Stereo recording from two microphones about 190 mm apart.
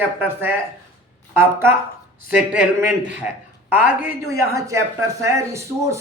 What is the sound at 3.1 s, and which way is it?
Speech, 5° right (ahead or behind).